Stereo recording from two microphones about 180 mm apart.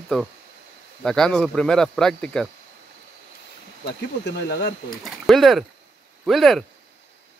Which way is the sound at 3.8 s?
70° left (ahead or behind).